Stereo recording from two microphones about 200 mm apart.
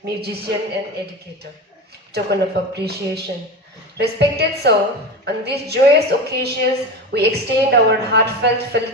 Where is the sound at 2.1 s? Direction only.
55° right (ahead or behind).